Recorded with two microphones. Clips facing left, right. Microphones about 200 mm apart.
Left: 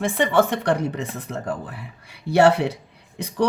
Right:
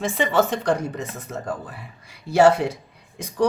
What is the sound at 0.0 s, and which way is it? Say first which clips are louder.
A woman's voice: left 2 dB; 55° left (ahead or behind).